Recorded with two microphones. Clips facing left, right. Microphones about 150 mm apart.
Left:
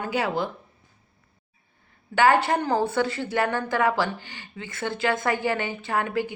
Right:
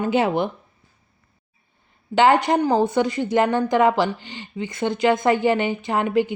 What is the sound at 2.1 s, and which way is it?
A woman's voice, 20° right (ahead or behind).